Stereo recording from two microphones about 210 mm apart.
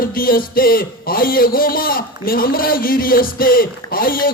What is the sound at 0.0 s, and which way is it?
Music, 45° left (ahead or behind).